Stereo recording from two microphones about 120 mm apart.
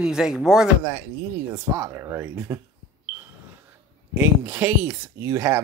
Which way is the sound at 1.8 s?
20° right (ahead or behind).